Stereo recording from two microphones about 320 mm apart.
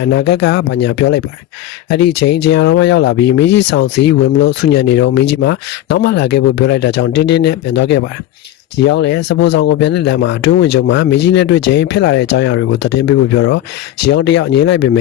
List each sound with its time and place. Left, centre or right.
0.3 s speech: left
0.5 s speech: left